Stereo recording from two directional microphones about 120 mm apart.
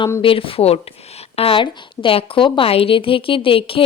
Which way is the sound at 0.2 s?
50° left (ahead or behind).